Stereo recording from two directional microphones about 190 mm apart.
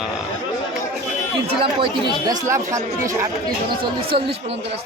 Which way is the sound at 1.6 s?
25° right (ahead or behind).